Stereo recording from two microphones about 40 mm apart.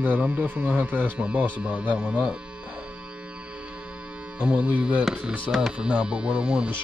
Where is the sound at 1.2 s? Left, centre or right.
Right.